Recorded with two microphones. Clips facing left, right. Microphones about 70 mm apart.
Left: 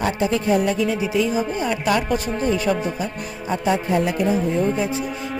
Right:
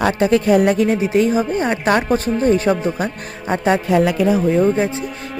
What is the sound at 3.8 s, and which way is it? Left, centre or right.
Speech, right.